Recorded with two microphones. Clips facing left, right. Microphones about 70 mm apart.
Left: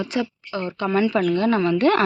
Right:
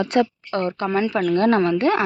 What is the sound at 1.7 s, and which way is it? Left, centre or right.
Speech, right.